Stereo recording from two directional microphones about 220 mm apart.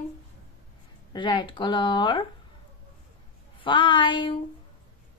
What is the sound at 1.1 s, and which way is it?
A woman's voice, 20° left (ahead or behind).